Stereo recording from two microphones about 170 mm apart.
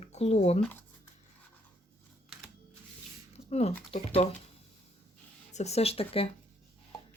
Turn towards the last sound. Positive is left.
turn(degrees=35)  # may be behind; listen again after turning